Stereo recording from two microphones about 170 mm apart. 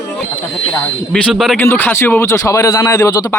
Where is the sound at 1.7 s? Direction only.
15° left (ahead or behind).